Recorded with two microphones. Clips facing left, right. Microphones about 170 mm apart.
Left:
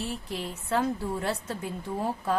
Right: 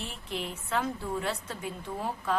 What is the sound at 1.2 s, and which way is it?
Speech, 40° left (ahead or behind).